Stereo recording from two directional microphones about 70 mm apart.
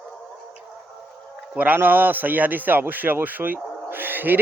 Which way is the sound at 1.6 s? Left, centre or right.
Right.